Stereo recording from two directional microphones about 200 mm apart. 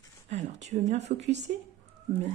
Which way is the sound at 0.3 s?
35° right (ahead or behind).